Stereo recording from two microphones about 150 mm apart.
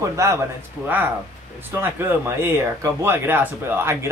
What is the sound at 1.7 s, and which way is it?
Speech, 15° right (ahead or behind).